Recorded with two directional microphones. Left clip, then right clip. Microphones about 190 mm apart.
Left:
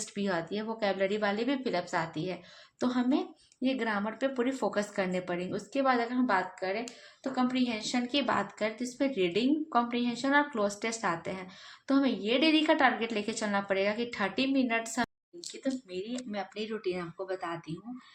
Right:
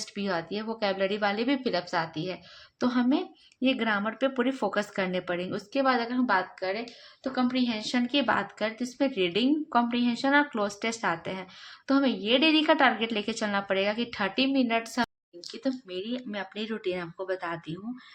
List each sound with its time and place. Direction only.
0.0 s a woman's voice: 20° right (ahead or behind); by 17.6 s 35° right (ahead or behind)